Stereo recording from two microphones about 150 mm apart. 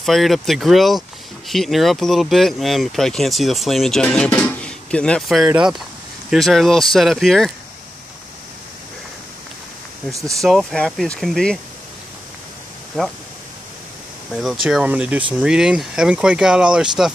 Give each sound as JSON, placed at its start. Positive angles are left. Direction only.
{"t": 0.0, "sound": "speech", "side_deg": 0}
{"t": 10.3, "sound": "speech", "side_deg": 0}
{"t": 13.0, "sound": "speech", "side_deg": 0}
{"t": 14.3, "sound": "speech", "side_deg": -5}